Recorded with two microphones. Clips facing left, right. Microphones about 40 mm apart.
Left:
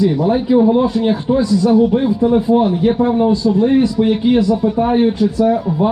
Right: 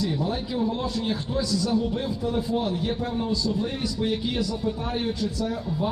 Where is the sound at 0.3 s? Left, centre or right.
Left.